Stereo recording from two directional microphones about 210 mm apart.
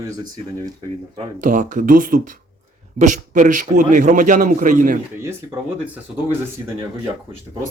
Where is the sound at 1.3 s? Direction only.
40° right (ahead or behind).